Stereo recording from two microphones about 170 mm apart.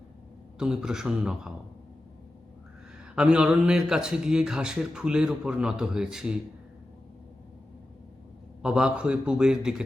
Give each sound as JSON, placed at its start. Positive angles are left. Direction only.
{"t": 0.6, "sound": "a man's voice", "side_deg": -5}
{"t": 3.2, "sound": "a man's voice", "side_deg": -5}
{"t": 8.6, "sound": "a man's voice", "side_deg": -5}